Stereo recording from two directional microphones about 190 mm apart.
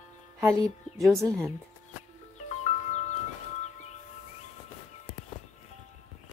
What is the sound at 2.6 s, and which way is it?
Music, 35° left (ahead or behind).